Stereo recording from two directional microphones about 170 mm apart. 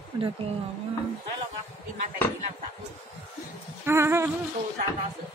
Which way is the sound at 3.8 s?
15° right (ahead or behind).